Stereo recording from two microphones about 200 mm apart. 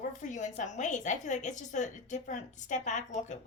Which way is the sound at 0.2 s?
40° left (ahead or behind).